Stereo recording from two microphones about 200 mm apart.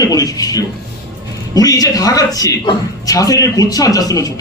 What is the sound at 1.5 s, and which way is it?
A man's voice, 20° left (ahead or behind).